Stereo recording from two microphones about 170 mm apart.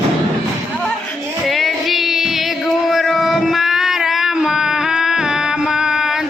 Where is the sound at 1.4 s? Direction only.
Centre (ahead or behind).